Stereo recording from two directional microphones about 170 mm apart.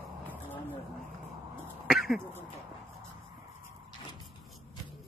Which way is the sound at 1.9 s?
Centre (ahead or behind).